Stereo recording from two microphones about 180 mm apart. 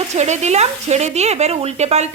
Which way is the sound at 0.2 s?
40° right (ahead or behind).